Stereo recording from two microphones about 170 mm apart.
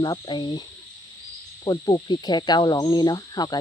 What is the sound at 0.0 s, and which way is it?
Cricket, 25° left (ahead or behind).